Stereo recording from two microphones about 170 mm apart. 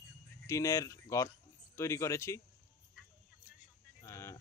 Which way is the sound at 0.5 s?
20° left (ahead or behind).